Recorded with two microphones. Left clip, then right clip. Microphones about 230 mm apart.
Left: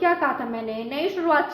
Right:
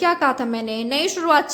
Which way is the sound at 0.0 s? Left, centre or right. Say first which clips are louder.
Right 3 dB; right.